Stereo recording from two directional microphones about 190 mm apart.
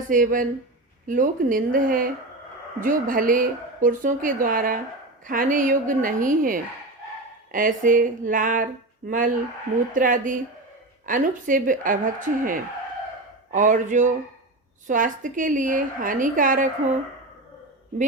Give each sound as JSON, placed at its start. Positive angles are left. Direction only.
{"t": 0.1, "sound": "a woman's voice", "side_deg": -45}